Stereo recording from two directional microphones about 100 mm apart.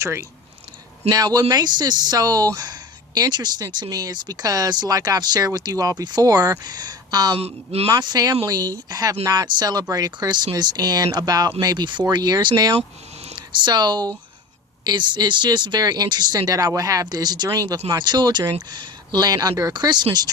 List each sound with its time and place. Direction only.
0.0 s speech: 30° right (ahead or behind)
1.1 s speech: 40° right (ahead or behind)
7.3 s a woman's voice: 90° right
7.9 s speech: 45° right (ahead or behind)